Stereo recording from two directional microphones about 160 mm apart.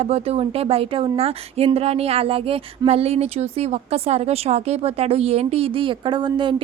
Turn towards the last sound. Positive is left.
turn(degrees=-30)  # may be behind; listen again after turning